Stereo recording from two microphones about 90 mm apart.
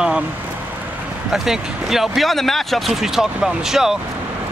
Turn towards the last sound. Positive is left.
turn(degrees=-5)  # may be behind; listen again after turning